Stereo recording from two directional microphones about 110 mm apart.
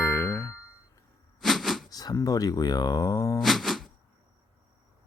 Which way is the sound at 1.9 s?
35° left (ahead or behind).